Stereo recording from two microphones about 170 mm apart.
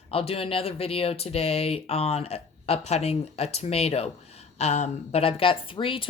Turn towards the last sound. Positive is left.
turn(degrees=30)  # may be behind; listen again after turning